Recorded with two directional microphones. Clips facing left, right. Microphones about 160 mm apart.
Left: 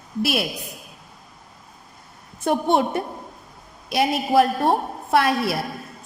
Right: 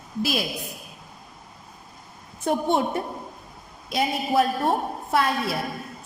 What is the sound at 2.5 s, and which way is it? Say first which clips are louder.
Speech: left 2 dB; 75° left (ahead or behind).